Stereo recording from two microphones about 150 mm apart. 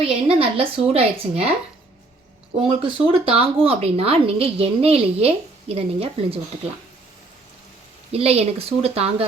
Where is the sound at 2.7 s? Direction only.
35° right (ahead or behind).